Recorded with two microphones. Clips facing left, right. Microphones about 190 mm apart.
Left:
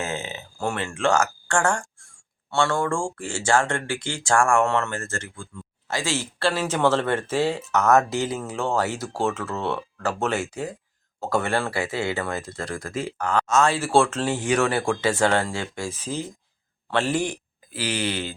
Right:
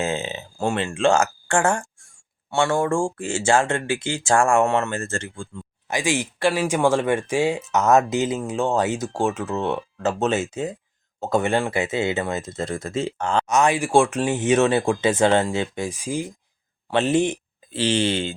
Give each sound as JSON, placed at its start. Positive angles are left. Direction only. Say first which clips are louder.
{"t": 0.0, "sound": "speech", "louder": "right 5 dB", "side_deg": -25}
{"t": 5.9, "sound": "speech", "louder": "right 4 dB", "side_deg": -15}